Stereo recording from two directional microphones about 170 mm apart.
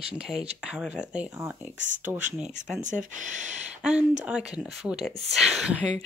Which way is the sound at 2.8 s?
45° right (ahead or behind).